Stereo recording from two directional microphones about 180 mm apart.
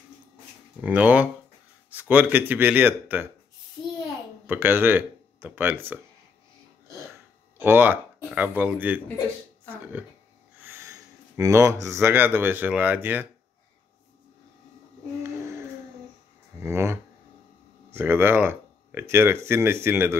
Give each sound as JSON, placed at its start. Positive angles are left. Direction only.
{"t": 0.7, "sound": "speech", "side_deg": -10}
{"t": 4.5, "sound": "speech", "side_deg": -10}
{"t": 7.5, "sound": "speech", "side_deg": -10}
{"t": 10.6, "sound": "speech", "side_deg": -15}
{"t": 15.2, "sound": "child singing", "side_deg": -15}
{"t": 16.5, "sound": "speech", "side_deg": -15}